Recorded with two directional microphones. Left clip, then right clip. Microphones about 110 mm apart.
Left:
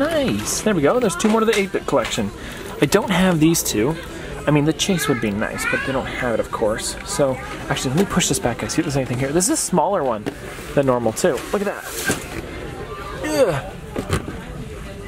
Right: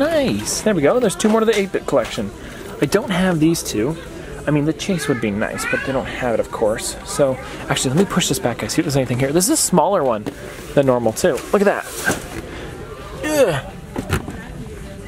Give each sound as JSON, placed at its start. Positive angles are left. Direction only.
{"t": 0.0, "sound": "speech", "side_deg": -10}
{"t": 5.4, "sound": "speech", "side_deg": -5}
{"t": 7.6, "sound": "speech", "side_deg": -15}
{"t": 11.5, "sound": "speech", "side_deg": -45}
{"t": 13.3, "sound": "a sound", "side_deg": -20}